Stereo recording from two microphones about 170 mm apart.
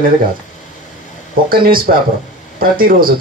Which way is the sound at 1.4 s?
60° right (ahead or behind).